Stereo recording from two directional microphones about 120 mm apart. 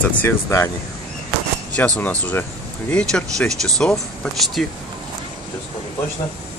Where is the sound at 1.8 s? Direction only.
15° left (ahead or behind).